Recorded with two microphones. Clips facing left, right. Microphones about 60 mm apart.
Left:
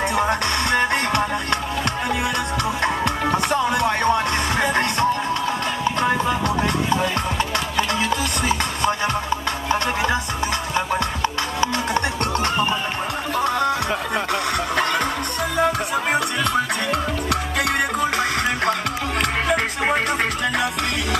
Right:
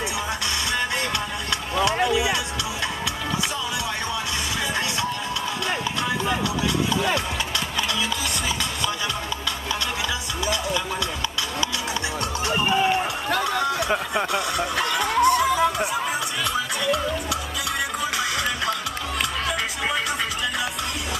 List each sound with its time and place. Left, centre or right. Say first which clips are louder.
0.1 s music: left 7 dB; left
5.9 s music: left 8 dB; left
7.7 s music: left 6 dB; left
11.2 s music: left 5 dB; left
13.4 s music: left 6 dB; left